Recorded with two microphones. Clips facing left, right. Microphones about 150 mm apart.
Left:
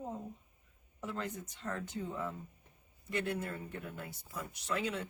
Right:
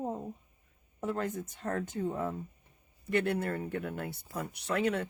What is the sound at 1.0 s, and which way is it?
Speech, 50° right (ahead or behind).